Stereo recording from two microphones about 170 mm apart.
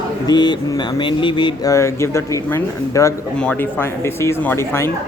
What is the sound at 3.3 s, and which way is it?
Speech, 5° left (ahead or behind).